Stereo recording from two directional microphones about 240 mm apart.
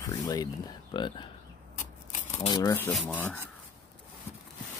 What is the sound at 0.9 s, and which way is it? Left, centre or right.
Speech, centre.